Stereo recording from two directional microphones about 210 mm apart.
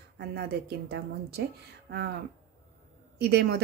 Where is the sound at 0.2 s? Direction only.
50° right (ahead or behind).